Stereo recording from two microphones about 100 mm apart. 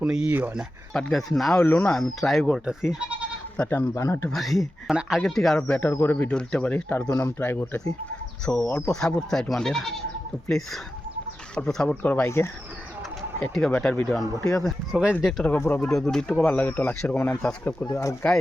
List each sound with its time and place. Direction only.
0.0 s speech: 10° right (ahead or behind)
0.3 s speech: 20° right (ahead or behind)
0.9 s speech: centre (ahead or behind)
2.6 s speech: 10° right (ahead or behind)
3.7 s speech: 20° left (ahead or behind)
3.9 s speech: 30° left (ahead or behind)
4.3 s speech: centre (ahead or behind)
5.5 s speech: 15° left (ahead or behind)
8.7 s speech: 10° left (ahead or behind)
11.5 s speech: 5° left (ahead or behind)
12.0 s speech: 20° left (ahead or behind)
13.4 s speech: 5° left (ahead or behind)
15.4 s speech: 20° left (ahead or behind)
16.1 s speech: 5° left (ahead or behind); by 18.3 s 25° left (ahead or behind)